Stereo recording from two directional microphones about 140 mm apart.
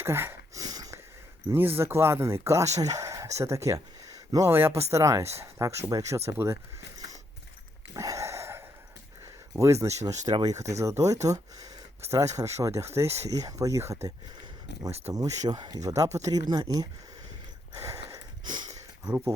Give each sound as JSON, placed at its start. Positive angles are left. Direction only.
{"t": 0.0, "sound": "a sound", "side_deg": -15}
{"t": 0.6, "sound": "sniff", "side_deg": -25}
{"t": 1.5, "sound": "speech", "side_deg": -15}
{"t": 7.9, "sound": "a sound", "side_deg": -20}
{"t": 9.8, "sound": "speech", "side_deg": -20}
{"t": 13.1, "sound": "speech", "side_deg": -50}
{"t": 13.3, "sound": "speech", "side_deg": -25}
{"t": 15.1, "sound": "speech", "side_deg": -30}
{"t": 17.8, "sound": "a sound", "side_deg": -20}
{"t": 19.0, "sound": "speech", "side_deg": -15}